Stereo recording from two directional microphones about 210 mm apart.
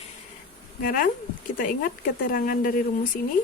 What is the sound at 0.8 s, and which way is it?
Speech, 45° left (ahead or behind).